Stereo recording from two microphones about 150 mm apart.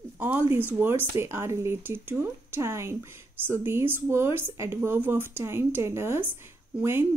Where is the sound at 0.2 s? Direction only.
10° right (ahead or behind).